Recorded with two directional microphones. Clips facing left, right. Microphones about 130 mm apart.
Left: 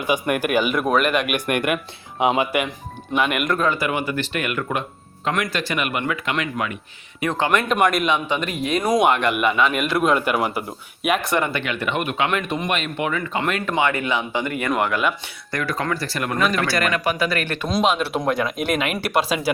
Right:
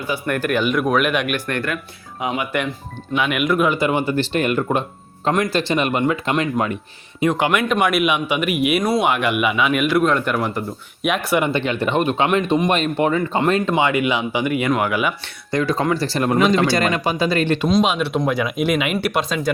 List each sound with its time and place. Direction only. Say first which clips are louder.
0.0 s speech: left 1 dB; 15° left (ahead or behind)
1.3 s speech: left 2 dB; 15° left (ahead or behind)
3.2 s speech: right 2 dB; centre (ahead or behind)
3.6 s speech: right 4 dB; 20° right (ahead or behind)
7.2 s speech: right 3 dB; 15° right (ahead or behind)
7.7 s speech: right 1 dB; 5° right (ahead or behind)
11.3 s speech: right 4 dB; 25° right (ahead or behind); by 15.1 s 5° right (ahead or behind)
15.5 s speech: right 5 dB; 20° right (ahead or behind)
17.7 s speech: left 2 dB; centre (ahead or behind)